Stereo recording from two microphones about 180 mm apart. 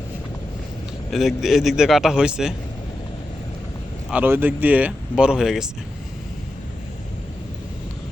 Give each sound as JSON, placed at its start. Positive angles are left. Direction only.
{"t": 1.1, "sound": "a man's voice", "side_deg": 0}
{"t": 4.1, "sound": "speech", "side_deg": -10}